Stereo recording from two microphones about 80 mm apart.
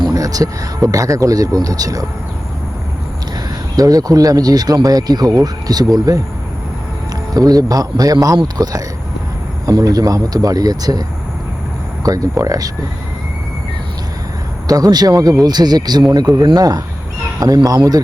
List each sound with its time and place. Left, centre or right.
0.0 s speech: right
3.8 s speech: right
7.3 s speech: right
12.0 s speech: right
14.7 s speech: right